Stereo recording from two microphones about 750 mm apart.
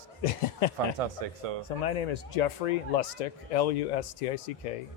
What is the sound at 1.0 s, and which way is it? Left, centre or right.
Speech, right.